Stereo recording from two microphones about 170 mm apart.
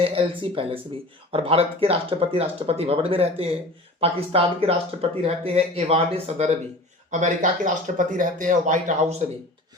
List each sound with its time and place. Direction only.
0.0 s speech: 35° right (ahead or behind)
7.1 s speech: 50° right (ahead or behind)